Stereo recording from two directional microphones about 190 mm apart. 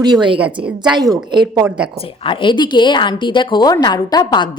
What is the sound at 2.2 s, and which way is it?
A woman's voice, 25° left (ahead or behind).